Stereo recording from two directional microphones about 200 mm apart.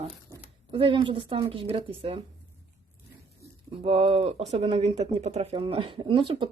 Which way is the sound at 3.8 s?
30° right (ahead or behind).